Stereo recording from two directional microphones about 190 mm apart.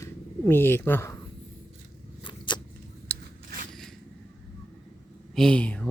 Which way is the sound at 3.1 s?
10° left (ahead or behind).